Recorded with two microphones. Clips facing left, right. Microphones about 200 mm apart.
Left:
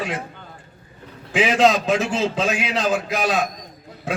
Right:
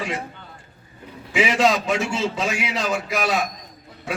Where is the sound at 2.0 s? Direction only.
50° left (ahead or behind).